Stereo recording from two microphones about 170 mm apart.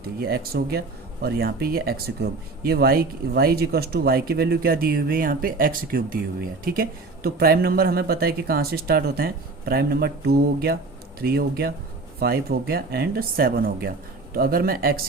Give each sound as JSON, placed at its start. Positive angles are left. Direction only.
{"t": 0.2, "sound": "speech", "side_deg": -65}